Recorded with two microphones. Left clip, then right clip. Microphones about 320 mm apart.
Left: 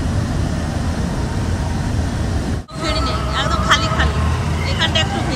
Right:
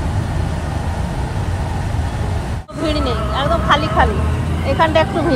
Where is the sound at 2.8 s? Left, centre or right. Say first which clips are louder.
Right 2 dB; centre.